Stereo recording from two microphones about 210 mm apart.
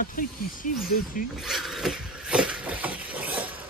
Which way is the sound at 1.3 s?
Centre (ahead or behind).